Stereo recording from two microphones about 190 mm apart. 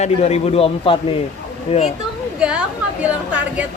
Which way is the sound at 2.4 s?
5° right (ahead or behind).